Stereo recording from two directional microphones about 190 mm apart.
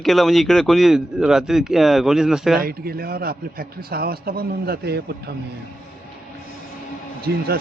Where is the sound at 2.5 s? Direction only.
50° right (ahead or behind).